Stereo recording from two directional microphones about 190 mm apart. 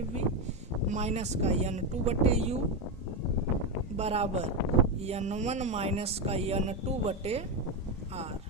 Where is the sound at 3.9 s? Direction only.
35° right (ahead or behind).